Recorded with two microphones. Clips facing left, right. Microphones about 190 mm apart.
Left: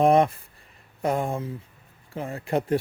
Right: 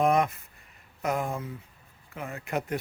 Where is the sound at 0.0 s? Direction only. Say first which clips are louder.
Left 5 dB; 30° left (ahead or behind).